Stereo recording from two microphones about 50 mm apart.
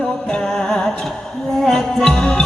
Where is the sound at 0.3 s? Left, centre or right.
Centre.